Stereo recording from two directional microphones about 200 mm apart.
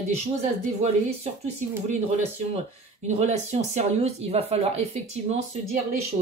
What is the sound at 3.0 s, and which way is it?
Speech, 35° right (ahead or behind).